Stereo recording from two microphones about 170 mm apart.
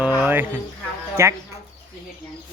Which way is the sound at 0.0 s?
10° right (ahead or behind).